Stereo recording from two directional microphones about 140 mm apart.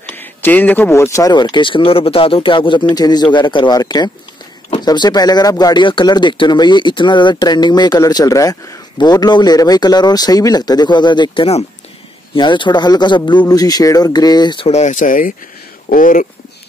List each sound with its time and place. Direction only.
0.1 s speech: 15° left (ahead or behind); by 14.7 s 30° left (ahead or behind)
14.7 s speech: 55° left (ahead or behind); by 16.3 s 80° left